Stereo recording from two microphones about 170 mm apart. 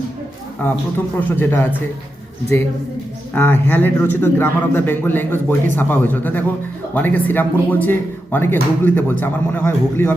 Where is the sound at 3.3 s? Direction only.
10° left (ahead or behind).